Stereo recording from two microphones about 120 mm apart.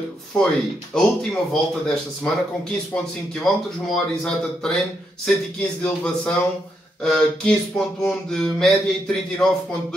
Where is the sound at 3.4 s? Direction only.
Centre (ahead or behind).